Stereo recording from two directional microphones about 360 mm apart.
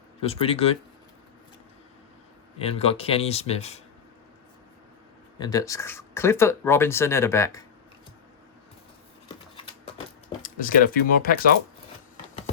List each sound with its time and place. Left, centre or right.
0.2 s speech: centre
2.6 s speech: centre
5.4 s speech: centre
10.4 s speech: left